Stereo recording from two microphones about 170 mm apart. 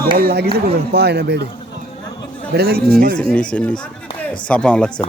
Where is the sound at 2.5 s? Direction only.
65° right (ahead or behind).